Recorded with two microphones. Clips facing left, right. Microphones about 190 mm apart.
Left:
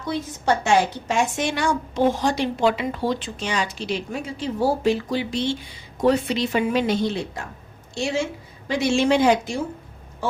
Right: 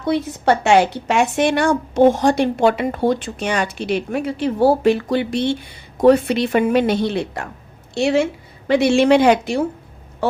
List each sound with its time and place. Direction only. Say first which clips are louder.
0.0 s a woman's voice: right 7 dB; 65° right (ahead or behind)